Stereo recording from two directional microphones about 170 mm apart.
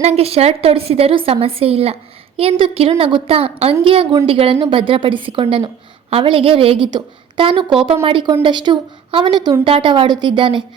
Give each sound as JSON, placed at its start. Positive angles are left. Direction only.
{"t": 0.0, "sound": "a woman's voice", "side_deg": -40}